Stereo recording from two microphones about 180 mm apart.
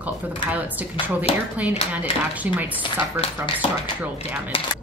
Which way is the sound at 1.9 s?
10° right (ahead or behind).